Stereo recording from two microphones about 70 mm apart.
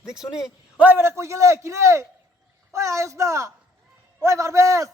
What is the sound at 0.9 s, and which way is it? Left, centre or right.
A man's voice, right.